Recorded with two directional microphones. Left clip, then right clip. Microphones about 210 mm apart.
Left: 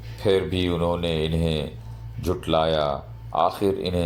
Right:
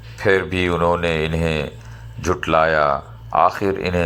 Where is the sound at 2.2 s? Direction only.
Centre (ahead or behind).